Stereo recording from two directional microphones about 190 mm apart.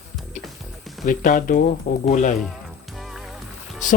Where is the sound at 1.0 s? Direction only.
45° left (ahead or behind).